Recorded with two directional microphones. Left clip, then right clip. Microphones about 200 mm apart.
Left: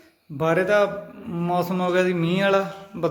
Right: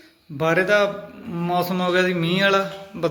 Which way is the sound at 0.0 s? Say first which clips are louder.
Right 2 dB; 10° left (ahead or behind).